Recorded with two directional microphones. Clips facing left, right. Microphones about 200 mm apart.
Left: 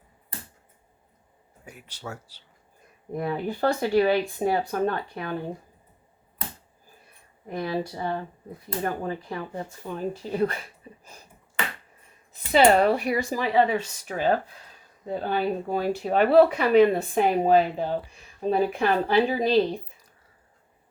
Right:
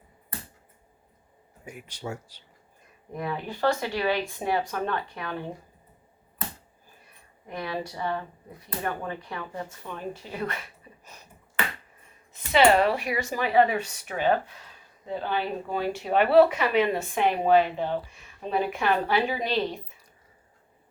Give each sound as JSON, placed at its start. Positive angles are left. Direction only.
{"t": 1.6, "sound": "speech", "side_deg": -10}
{"t": 3.2, "sound": "speech", "side_deg": 35}
{"t": 7.4, "sound": "speech", "side_deg": 35}
{"t": 12.3, "sound": "speech", "side_deg": 35}